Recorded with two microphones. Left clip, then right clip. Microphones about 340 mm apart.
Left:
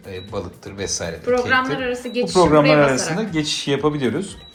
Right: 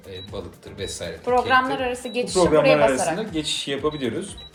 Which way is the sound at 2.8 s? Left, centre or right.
Centre.